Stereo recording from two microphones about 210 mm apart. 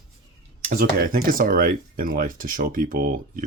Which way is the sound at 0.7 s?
45° right (ahead or behind).